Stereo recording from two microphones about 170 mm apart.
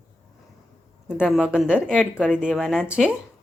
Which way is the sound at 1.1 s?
5° right (ahead or behind).